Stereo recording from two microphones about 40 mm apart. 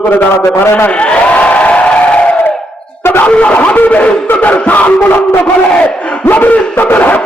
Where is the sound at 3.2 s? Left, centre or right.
Left.